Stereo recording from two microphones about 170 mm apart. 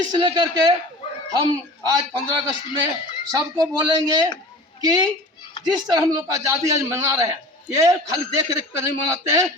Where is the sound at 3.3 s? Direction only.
20° right (ahead or behind).